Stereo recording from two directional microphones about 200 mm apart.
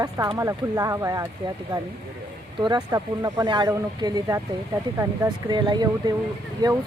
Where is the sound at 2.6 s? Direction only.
20° right (ahead or behind).